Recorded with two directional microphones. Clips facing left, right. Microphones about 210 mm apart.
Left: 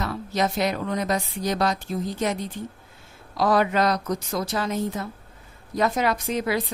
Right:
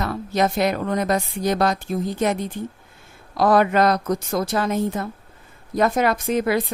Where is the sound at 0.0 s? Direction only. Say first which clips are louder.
Right 4 dB; 55° right (ahead or behind).